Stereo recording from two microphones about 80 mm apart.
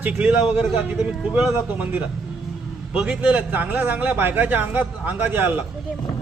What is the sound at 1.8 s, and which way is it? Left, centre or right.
Speech, right.